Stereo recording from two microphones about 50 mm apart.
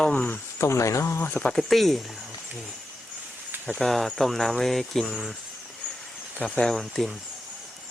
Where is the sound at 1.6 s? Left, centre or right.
Centre.